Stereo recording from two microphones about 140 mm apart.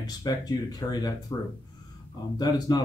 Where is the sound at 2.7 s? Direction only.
30° left (ahead or behind).